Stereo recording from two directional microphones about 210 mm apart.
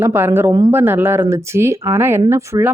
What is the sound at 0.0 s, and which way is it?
A woman's voice, 10° right (ahead or behind).